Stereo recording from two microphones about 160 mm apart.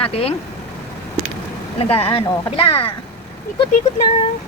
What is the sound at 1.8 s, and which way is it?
A woman's voice, 35° left (ahead or behind).